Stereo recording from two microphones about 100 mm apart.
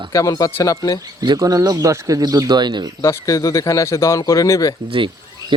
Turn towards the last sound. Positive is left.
turn(degrees=-55)  # may be behind; listen again after turning